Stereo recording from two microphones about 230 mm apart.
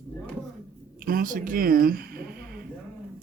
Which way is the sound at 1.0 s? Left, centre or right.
Right.